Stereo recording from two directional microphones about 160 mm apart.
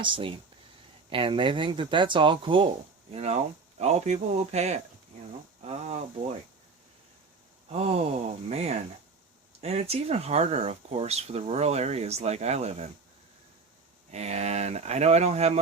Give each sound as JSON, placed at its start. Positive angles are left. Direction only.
{"t": 0.0, "sound": "speech", "side_deg": -30}
{"t": 7.7, "sound": "speech", "side_deg": -40}
{"t": 14.1, "sound": "speech", "side_deg": -45}